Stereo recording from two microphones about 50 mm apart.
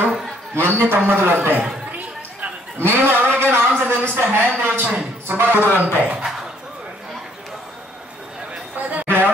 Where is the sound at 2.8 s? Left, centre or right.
Right.